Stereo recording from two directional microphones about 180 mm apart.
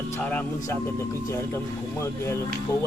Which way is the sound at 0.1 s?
10° left (ahead or behind).